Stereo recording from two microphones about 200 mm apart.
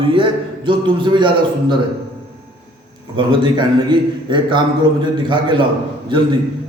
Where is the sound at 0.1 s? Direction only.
25° right (ahead or behind).